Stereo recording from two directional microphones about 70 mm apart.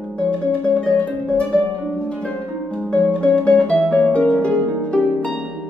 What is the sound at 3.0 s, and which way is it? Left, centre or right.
Music, centre.